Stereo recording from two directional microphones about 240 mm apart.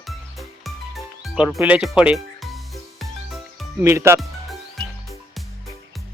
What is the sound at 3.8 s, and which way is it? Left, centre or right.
Speech, centre.